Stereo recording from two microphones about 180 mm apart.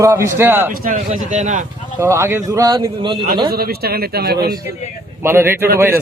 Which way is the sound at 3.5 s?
60° right (ahead or behind).